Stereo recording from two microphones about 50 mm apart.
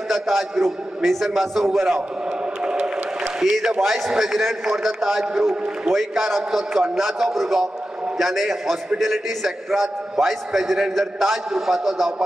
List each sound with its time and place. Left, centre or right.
0.1 s a man's voice: centre
2.6 s a sound: centre
3.3 s a man's voice: centre